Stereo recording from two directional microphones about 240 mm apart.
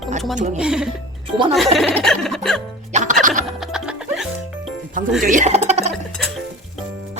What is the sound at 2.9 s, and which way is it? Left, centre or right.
Music, right.